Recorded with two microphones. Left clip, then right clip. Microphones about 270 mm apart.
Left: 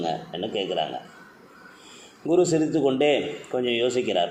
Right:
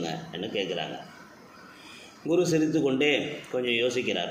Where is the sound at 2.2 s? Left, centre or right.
Left.